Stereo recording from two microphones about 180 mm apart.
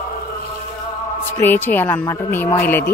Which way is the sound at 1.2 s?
10° left (ahead or behind).